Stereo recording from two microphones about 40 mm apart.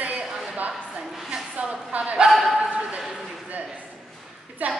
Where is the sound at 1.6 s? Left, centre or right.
Right.